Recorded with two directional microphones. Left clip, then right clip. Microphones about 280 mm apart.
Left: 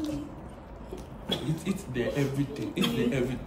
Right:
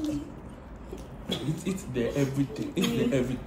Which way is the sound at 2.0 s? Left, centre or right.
Centre.